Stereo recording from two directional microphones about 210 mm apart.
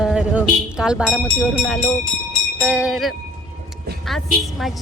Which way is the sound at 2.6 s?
5° right (ahead or behind).